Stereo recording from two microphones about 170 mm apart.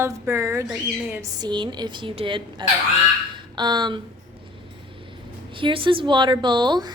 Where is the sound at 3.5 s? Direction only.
25° right (ahead or behind).